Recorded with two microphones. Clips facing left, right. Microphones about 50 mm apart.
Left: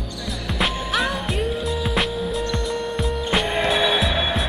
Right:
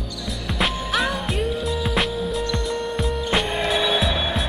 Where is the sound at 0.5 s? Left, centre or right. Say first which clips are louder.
Even; centre.